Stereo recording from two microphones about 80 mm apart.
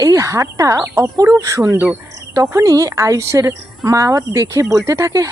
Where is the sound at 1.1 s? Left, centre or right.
Right.